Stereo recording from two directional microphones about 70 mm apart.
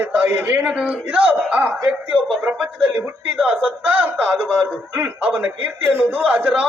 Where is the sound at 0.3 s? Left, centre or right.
Centre.